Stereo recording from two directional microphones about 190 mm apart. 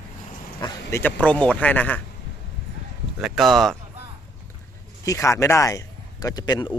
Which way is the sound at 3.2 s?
Centre (ahead or behind).